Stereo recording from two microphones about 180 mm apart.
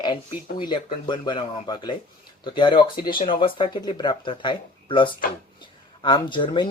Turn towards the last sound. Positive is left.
turn(degrees=25)  # may be behind; listen again after turning